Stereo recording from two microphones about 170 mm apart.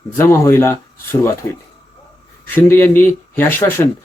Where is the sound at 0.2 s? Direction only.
15° left (ahead or behind).